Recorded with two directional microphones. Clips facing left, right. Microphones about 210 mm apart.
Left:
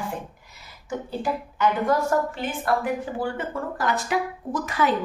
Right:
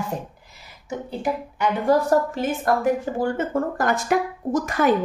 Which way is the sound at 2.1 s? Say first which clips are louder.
Right 4 dB; 40° right (ahead or behind).